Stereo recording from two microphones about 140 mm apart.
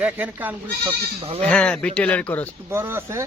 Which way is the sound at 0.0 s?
10° right (ahead or behind).